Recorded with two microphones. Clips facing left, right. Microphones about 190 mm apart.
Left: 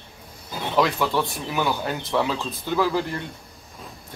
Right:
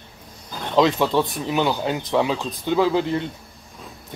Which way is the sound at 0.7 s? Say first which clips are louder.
Right 4 dB; 20° right (ahead or behind).